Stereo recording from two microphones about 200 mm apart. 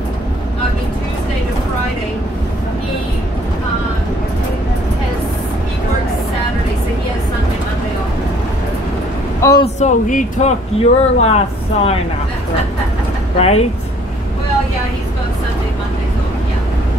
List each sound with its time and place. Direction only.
9.4 s a sound: 15° left (ahead or behind)
9.8 s speech: 40° left (ahead or behind)
13.4 s speech: 30° left (ahead or behind)